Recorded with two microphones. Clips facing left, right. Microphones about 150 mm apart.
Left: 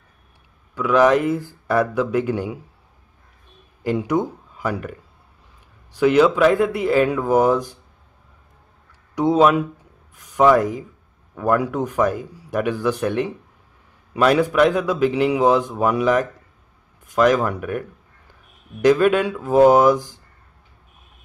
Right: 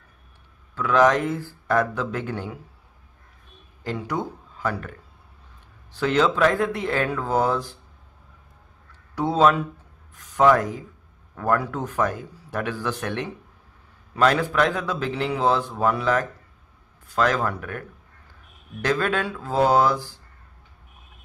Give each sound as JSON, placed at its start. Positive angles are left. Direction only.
{"t": 0.7, "sound": "a man's voice", "side_deg": 10}
{"t": 3.8, "sound": "speech", "side_deg": 15}
{"t": 5.9, "sound": "a man's voice", "side_deg": 10}
{"t": 9.1, "sound": "a man's voice", "side_deg": 15}